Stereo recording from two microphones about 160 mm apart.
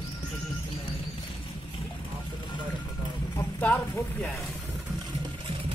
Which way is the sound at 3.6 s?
10° left (ahead or behind).